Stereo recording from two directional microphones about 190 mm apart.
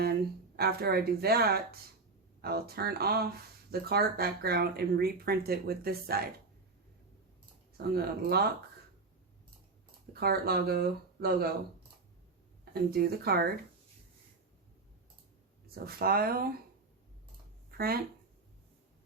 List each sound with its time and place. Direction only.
0.0 s speech: 55° right (ahead or behind)
7.9 s speech: 55° right (ahead or behind)
10.1 s speech: 55° right (ahead or behind)
12.7 s speech: 55° right (ahead or behind)
15.6 s speech: 50° right (ahead or behind)
17.7 s speech: 55° right (ahead or behind)